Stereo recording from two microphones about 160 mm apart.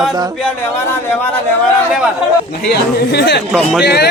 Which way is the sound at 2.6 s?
85° left.